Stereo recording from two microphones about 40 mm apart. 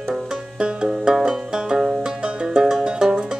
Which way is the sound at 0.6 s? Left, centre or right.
Right.